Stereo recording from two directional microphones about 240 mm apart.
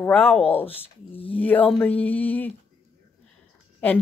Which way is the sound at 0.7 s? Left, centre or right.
Left.